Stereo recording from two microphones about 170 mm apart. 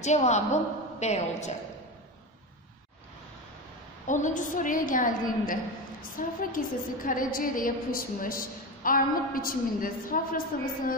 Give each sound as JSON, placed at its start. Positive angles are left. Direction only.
{"t": 0.0, "sound": "a woman's voice", "side_deg": 40}
{"t": 4.1, "sound": "a woman's voice", "side_deg": 45}